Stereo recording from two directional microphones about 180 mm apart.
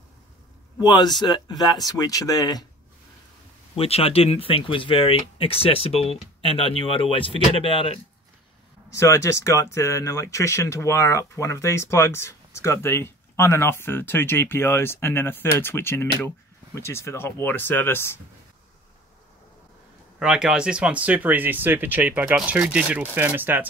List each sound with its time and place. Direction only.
0.7 s speech: 25° left (ahead or behind)
3.7 s speech: 35° left (ahead or behind)
8.9 s speech: 15° left (ahead or behind)
20.2 s speech: 5° right (ahead or behind)